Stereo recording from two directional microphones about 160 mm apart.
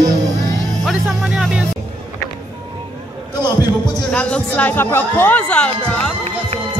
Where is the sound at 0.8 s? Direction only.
5° right (ahead or behind).